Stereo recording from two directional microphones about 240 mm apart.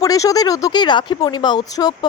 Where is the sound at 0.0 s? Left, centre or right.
Centre.